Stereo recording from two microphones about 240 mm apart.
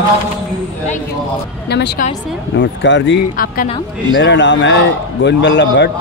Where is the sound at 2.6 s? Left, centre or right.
Left.